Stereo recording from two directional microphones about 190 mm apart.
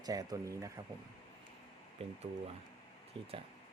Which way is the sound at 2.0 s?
35° right (ahead or behind).